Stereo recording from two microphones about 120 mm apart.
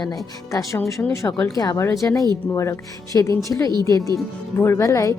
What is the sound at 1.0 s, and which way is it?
A woman's voice, 20° left (ahead or behind).